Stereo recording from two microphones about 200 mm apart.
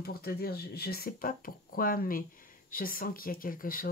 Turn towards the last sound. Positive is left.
turn(degrees=45)  # may be behind; listen again after turning